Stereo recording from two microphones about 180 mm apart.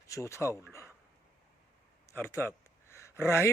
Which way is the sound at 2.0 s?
15° left (ahead or behind).